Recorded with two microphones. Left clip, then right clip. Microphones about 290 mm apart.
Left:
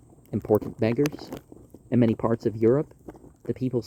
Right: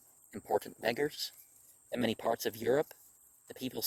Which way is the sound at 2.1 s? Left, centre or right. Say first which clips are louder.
Left 8 dB; right.